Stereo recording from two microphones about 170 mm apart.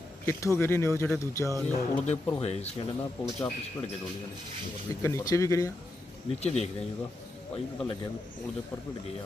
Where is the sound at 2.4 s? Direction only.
40° left (ahead or behind).